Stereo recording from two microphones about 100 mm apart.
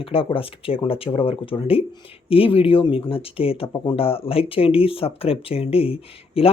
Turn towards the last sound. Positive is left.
turn(degrees=75)  # may be behind; listen again after turning